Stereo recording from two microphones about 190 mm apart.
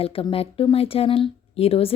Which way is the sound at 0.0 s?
30° left (ahead or behind).